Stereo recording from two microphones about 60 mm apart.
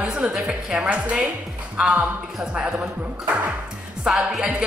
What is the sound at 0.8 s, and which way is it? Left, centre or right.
A woman's voice, right.